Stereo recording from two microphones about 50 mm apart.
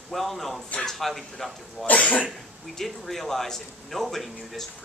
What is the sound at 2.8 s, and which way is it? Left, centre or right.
Speech, centre.